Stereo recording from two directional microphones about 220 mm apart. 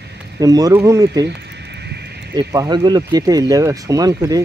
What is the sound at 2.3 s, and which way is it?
Speech, 15° right (ahead or behind).